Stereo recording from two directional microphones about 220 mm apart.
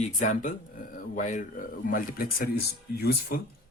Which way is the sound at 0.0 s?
35° left (ahead or behind).